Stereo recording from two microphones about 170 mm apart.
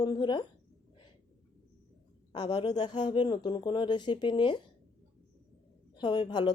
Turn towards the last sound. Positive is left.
turn(degrees=25)  # may be behind; listen again after turning